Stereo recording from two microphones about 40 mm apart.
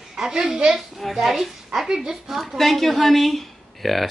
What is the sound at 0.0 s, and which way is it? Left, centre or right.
Speech, centre.